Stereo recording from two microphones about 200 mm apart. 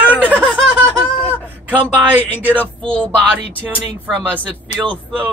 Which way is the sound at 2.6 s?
5° left (ahead or behind).